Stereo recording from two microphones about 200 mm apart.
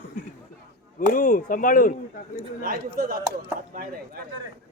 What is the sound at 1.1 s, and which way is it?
Speech, 45° left (ahead or behind).